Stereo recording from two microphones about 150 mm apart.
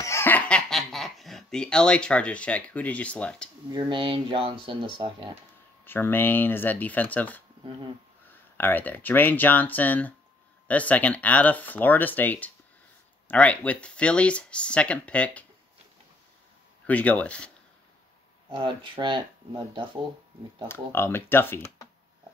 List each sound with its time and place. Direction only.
0.0 s chuckle: 15° left (ahead or behind)
3.7 s speech: 30° right (ahead or behind)
5.9 s speech: 15° left (ahead or behind)
16.8 s speech: 10° left (ahead or behind)
18.5 s speech: 35° right (ahead or behind)
20.6 s speech: 15° left (ahead or behind)